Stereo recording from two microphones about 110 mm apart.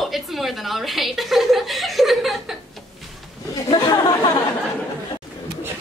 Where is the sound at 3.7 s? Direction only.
35° left (ahead or behind).